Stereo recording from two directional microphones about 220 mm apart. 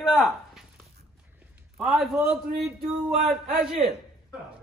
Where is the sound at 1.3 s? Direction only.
5° right (ahead or behind).